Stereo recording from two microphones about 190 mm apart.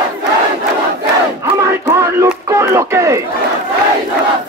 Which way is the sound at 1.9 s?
15° right (ahead or behind).